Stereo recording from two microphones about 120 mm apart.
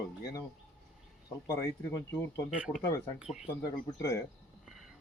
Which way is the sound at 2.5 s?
10° right (ahead or behind).